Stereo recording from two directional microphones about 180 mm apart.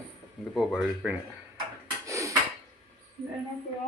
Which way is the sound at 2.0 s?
15° right (ahead or behind).